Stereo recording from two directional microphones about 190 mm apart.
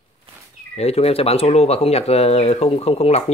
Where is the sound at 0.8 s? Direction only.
30° left (ahead or behind).